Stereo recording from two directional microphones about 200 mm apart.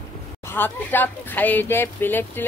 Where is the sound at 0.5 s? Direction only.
10° left (ahead or behind).